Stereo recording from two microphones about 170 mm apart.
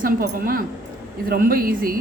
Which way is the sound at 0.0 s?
55° right (ahead or behind).